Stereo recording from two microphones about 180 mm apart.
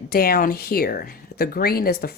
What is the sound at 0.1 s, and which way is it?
A woman's voice, 55° left (ahead or behind).